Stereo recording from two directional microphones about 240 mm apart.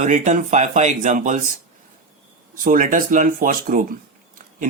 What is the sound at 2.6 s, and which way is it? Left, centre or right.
Speech, right.